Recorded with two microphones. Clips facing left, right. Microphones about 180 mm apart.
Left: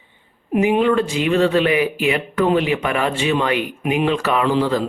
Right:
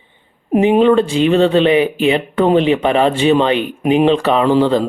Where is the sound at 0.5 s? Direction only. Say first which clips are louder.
Right 5 dB; 30° right (ahead or behind).